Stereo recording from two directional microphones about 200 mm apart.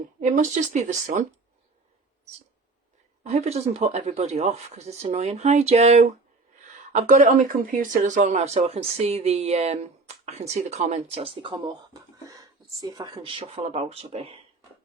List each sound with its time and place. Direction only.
0.2 s speech: 40° right (ahead or behind)
3.2 s speech: 30° right (ahead or behind)